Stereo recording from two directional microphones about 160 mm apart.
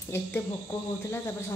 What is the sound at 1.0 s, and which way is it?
Speech, 15° left (ahead or behind).